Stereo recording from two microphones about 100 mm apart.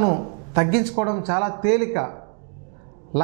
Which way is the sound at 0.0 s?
20° right (ahead or behind).